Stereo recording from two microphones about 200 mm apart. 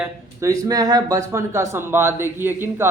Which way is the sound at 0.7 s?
20° right (ahead or behind).